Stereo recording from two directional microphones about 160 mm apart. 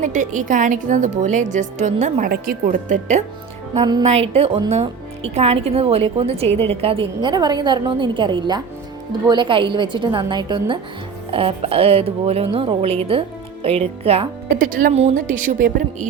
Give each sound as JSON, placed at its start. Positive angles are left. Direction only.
{"t": 0.0, "sound": "a woman's voice", "side_deg": -50}
{"t": 2.3, "sound": "a woman's voice", "side_deg": -60}
{"t": 3.8, "sound": "a woman's voice", "side_deg": -25}
{"t": 4.0, "sound": "a woman's voice", "side_deg": -40}
{"t": 14.5, "sound": "speech", "side_deg": -60}
{"t": 14.9, "sound": "a woman's voice", "side_deg": -50}